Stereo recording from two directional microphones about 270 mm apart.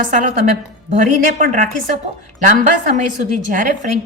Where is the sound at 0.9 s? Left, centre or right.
Right.